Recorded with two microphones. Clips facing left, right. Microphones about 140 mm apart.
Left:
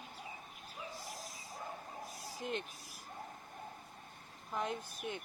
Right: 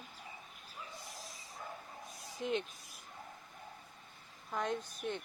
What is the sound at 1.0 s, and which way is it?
Dog, centre (ahead or behind).